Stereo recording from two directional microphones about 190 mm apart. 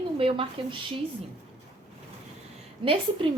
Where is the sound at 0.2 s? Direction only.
30° right (ahead or behind).